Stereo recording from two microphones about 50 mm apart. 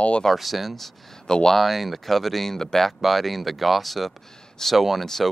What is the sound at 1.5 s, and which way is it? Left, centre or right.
Speech, centre.